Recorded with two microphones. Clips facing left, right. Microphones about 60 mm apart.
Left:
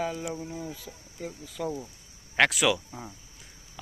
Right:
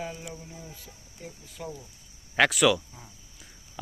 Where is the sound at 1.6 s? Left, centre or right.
Left.